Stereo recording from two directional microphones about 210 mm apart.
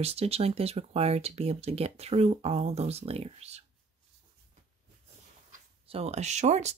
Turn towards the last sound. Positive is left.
turn(degrees=-35)  # may be behind; listen again after turning